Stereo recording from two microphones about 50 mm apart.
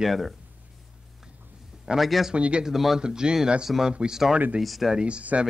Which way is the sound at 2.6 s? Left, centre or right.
Centre.